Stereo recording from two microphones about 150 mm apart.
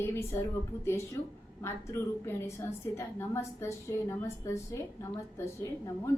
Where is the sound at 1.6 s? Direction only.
15° left (ahead or behind).